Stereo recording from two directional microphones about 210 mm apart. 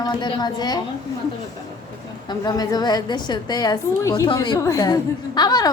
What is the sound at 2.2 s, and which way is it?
A woman's voice, 20° left (ahead or behind).